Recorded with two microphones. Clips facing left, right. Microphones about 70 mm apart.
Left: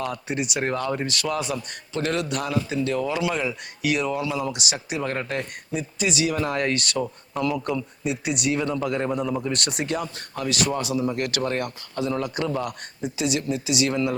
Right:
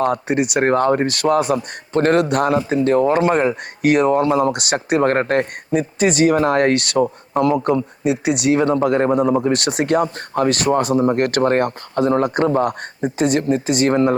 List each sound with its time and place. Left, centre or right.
0.0 s speech: right
7.0 s speech: right
8.0 s speech: right